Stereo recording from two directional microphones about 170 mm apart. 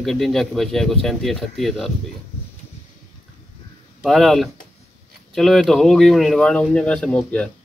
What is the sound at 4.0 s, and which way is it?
Speech, centre (ahead or behind).